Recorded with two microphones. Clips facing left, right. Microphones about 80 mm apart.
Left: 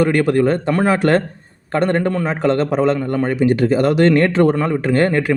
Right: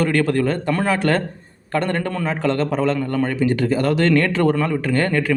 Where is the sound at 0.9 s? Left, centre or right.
Left.